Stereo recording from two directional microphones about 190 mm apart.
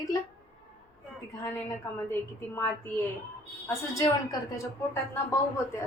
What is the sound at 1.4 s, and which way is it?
A woman's voice, 15° left (ahead or behind).